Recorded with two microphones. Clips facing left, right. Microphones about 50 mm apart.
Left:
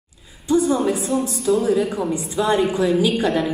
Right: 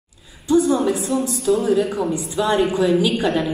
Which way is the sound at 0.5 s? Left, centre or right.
Left.